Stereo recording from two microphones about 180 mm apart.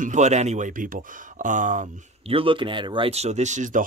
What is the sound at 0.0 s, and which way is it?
Speech, 40° right (ahead or behind).